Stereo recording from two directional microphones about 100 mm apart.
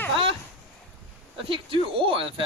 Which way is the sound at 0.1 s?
60° right (ahead or behind).